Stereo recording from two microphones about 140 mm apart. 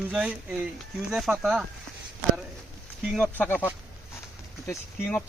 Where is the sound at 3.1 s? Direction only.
5° left (ahead or behind).